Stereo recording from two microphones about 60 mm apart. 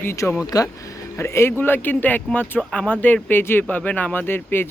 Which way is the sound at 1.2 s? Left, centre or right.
Left.